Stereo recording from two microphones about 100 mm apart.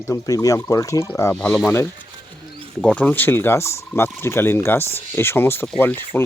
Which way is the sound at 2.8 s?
15° left (ahead or behind).